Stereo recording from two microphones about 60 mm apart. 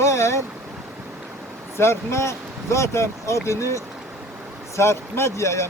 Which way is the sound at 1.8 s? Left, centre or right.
Left.